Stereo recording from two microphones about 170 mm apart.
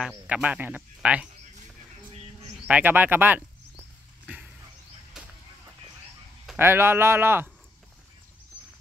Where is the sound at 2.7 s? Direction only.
10° right (ahead or behind).